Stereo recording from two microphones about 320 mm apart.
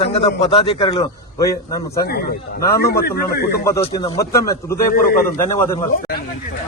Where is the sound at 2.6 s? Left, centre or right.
Left.